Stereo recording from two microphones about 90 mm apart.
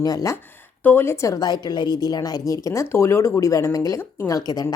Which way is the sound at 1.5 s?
55° left (ahead or behind).